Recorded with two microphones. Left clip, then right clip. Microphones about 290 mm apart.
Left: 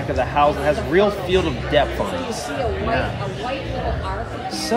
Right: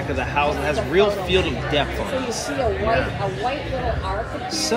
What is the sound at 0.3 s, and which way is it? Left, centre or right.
Speech, left.